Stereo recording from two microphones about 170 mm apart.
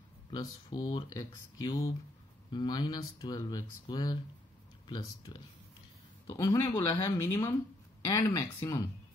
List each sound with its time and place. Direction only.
0.3 s speech: 25° left (ahead or behind)